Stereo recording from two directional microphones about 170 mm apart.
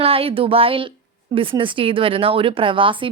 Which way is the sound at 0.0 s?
35° right (ahead or behind).